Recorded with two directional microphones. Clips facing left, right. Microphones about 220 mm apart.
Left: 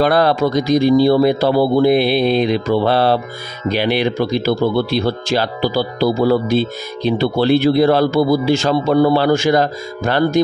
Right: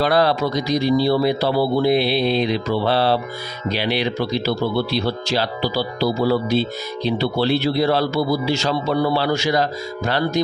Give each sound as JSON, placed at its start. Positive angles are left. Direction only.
{"t": 0.0, "sound": "speech", "side_deg": 50}